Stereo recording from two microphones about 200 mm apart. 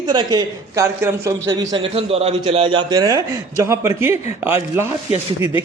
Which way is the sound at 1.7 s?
30° right (ahead or behind).